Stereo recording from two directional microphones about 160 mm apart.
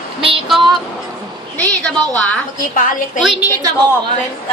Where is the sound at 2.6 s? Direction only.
55° left (ahead or behind).